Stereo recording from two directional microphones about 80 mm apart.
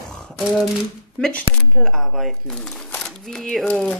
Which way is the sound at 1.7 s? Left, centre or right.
Centre.